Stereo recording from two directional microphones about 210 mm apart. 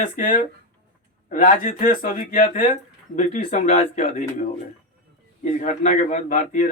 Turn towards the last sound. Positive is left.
turn(degrees=35)  # may be behind; listen again after turning